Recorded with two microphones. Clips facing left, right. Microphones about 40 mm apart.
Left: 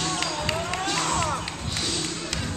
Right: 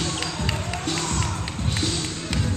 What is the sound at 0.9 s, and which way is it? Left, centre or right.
Music, left.